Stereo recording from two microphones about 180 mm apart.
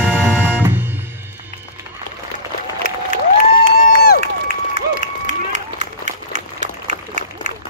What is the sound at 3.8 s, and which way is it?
Crowd, 60° left (ahead or behind).